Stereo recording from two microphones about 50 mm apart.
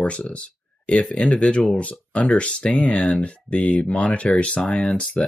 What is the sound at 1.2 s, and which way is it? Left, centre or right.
Speech, left.